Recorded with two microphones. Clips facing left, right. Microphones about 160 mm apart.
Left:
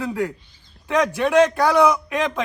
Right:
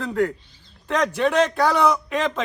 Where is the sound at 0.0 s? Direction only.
5° left (ahead or behind).